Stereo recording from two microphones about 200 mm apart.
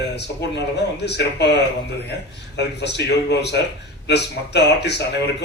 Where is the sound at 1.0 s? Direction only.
55° left (ahead or behind).